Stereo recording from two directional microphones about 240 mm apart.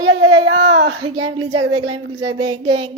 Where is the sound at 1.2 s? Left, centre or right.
Centre.